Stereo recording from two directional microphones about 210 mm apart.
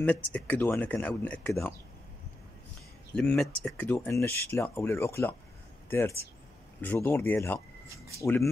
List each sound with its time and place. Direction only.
0.0 s speech: 5° left (ahead or behind)
3.2 s speech: 5° left (ahead or behind)